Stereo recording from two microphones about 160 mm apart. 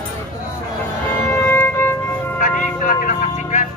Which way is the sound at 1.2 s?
15° left (ahead or behind).